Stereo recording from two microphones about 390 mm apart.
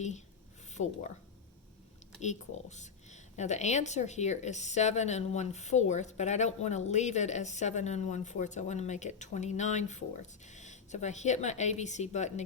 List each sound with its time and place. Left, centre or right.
2.2 s a woman's voice: centre